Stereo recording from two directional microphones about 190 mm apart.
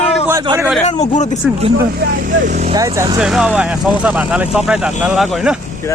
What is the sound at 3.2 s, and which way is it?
Speech, 5° right (ahead or behind).